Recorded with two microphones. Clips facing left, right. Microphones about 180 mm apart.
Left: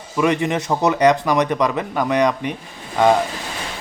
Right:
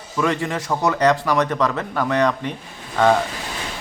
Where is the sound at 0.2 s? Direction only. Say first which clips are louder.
Left 3 dB; 20° left (ahead or behind).